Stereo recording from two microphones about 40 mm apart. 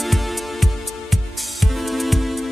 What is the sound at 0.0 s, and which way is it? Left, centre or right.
Music, centre.